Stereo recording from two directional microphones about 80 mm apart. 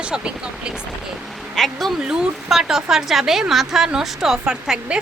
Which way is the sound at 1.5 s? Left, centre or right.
Centre.